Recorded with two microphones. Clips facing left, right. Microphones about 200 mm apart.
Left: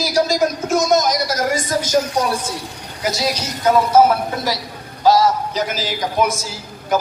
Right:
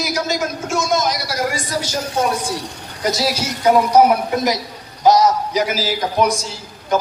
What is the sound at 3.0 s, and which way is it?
A woman's voice, 5° right (ahead or behind).